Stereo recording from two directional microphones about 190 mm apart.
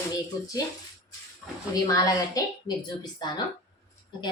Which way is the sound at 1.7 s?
20° left (ahead or behind).